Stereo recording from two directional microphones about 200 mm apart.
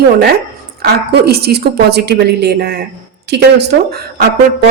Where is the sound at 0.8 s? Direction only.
50° right (ahead or behind).